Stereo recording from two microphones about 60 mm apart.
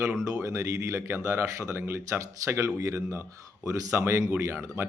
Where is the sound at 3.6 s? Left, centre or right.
Right.